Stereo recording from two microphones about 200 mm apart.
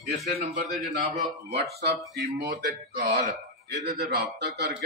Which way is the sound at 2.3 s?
45° right (ahead or behind).